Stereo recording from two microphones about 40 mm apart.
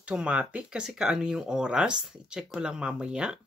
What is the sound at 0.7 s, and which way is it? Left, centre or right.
Speech, centre.